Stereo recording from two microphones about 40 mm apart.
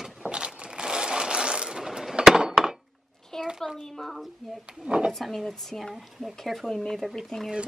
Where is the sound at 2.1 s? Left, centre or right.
Centre.